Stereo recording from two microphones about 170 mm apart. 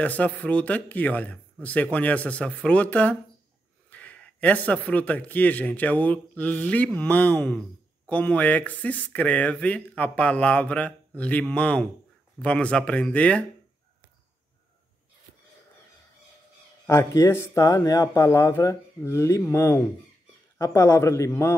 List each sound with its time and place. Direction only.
0.0 s speech: 10° left (ahead or behind)
16.8 s speech: 20° left (ahead or behind)